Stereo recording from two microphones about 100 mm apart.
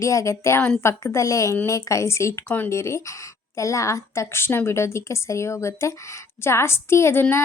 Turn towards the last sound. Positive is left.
turn(degrees=25)  # may be behind; listen again after turning